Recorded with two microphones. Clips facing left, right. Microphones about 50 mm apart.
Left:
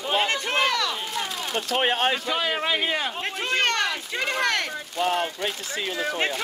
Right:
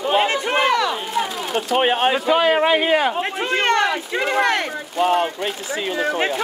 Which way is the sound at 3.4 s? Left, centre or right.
Centre.